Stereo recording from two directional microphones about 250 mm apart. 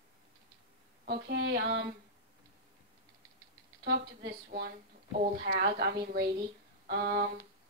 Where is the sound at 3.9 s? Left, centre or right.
Right.